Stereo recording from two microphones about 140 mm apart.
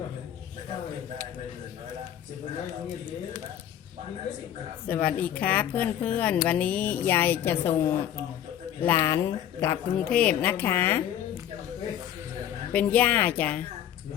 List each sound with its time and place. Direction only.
4.9 s a woman's voice: 10° left (ahead or behind)
9.9 s a woman's voice: 5° left (ahead or behind)
12.7 s a woman's voice: 10° left (ahead or behind)